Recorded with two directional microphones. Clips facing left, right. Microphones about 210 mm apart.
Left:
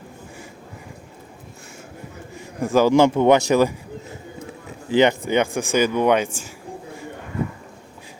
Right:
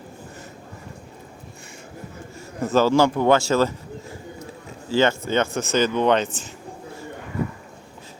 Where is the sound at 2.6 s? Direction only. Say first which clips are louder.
Left 2 dB; 10° left (ahead or behind).